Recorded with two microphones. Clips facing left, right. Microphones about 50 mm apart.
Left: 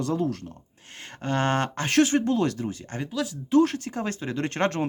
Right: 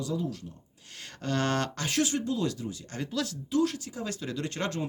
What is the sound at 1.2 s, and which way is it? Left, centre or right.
Speech, left.